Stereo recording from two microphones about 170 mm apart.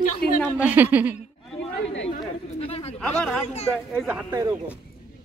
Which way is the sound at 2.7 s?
35° left (ahead or behind).